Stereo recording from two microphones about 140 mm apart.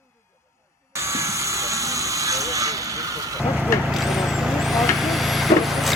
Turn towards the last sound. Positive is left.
turn(degrees=0)  # may be behind; listen again after turning